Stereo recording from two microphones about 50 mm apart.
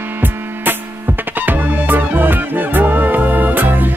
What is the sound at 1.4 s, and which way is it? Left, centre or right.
Music, right.